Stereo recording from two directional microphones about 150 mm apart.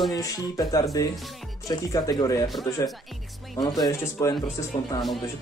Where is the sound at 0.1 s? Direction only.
25° left (ahead or behind).